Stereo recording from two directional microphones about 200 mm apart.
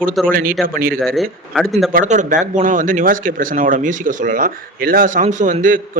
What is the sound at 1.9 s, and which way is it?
A man's voice, 40° right (ahead or behind).